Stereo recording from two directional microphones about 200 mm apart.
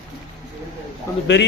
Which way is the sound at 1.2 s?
60° left (ahead or behind).